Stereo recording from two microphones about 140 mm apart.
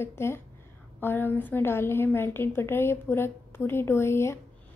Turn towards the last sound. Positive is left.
turn(degrees=20)  # may be behind; listen again after turning